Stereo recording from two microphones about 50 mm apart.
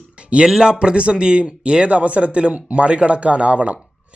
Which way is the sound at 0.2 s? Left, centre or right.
Right.